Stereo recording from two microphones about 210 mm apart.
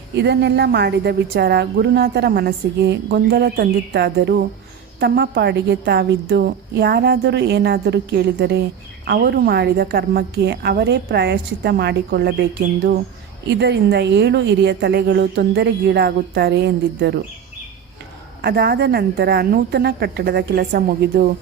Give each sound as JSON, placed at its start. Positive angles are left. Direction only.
{"t": 0.2, "sound": "a woman's voice", "side_deg": -55}
{"t": 13.5, "sound": "a woman's voice", "side_deg": -55}
{"t": 18.4, "sound": "a woman's voice", "side_deg": -50}